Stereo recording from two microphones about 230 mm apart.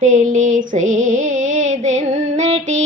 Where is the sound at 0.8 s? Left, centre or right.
Right.